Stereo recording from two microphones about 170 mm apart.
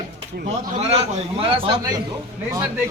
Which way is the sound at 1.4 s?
30° right (ahead or behind).